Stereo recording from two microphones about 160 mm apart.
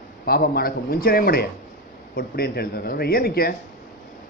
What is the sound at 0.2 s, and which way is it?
A man's voice, 70° left (ahead or behind).